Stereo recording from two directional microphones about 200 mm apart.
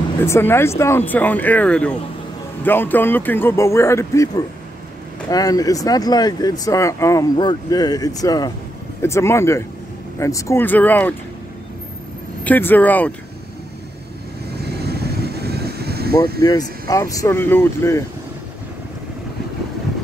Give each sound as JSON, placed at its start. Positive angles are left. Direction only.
{"t": 0.2, "sound": "speech", "side_deg": 10}
{"t": 12.4, "sound": "speech", "side_deg": 10}
{"t": 14.5, "sound": "vehicle", "side_deg": -55}
{"t": 16.3, "sound": "speech", "side_deg": 20}